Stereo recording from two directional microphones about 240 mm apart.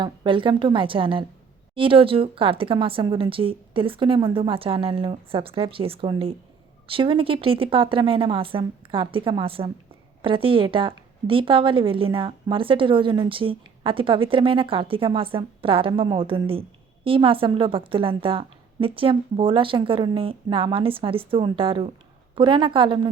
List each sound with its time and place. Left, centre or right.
0.0 s speech: right